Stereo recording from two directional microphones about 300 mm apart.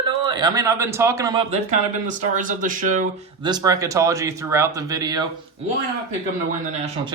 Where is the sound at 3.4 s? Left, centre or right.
Centre.